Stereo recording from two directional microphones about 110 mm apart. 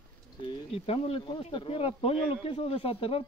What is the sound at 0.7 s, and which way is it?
Speech, 60° left (ahead or behind).